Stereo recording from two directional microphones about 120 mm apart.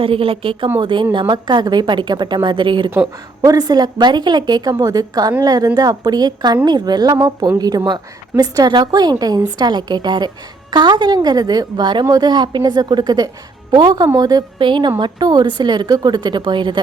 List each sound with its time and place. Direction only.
0.0 s speech: 50° right (ahead or behind)